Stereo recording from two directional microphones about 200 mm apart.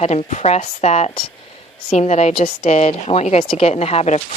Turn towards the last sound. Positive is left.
turn(degrees=30)  # may be behind; listen again after turning